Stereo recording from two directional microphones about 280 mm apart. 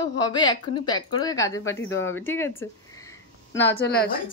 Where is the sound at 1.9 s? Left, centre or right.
Left.